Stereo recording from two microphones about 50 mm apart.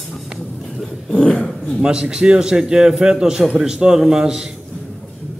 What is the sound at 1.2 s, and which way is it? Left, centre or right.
Dog, left.